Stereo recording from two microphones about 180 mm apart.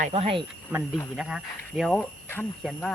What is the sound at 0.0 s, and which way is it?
Speech, 35° right (ahead or behind).